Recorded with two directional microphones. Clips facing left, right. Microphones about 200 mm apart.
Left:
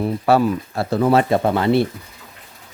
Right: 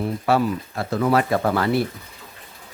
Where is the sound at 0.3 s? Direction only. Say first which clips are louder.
Left 4 dB; 35° left (ahead or behind).